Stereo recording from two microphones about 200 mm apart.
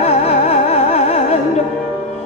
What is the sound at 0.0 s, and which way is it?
Music, 30° left (ahead or behind).